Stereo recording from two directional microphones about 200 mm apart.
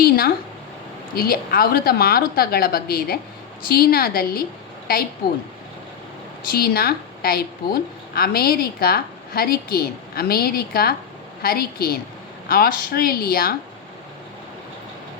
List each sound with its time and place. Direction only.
1.1 s a woman's voice: 50° left (ahead or behind)
6.5 s a woman's voice: 50° left (ahead or behind)